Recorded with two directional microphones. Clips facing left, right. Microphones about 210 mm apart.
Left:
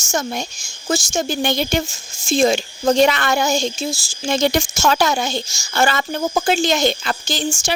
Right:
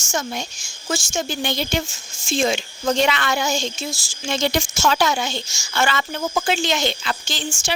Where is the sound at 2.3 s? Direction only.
40° left (ahead or behind).